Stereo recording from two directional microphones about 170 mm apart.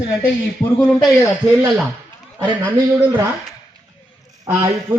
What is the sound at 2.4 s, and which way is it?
Speech, 20° right (ahead or behind).